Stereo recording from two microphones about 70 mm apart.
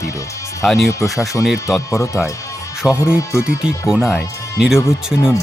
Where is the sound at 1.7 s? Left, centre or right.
Left.